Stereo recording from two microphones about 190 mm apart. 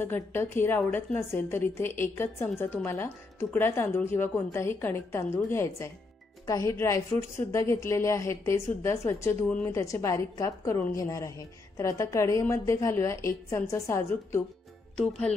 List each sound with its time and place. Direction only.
0.0 s a woman's voice: 10° left (ahead or behind)
15.0 s speech: 5° left (ahead or behind)